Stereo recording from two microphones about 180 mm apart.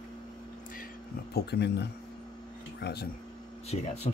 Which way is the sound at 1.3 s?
65° left (ahead or behind).